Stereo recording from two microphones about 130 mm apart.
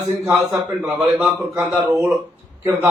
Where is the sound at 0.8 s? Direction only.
10° right (ahead or behind).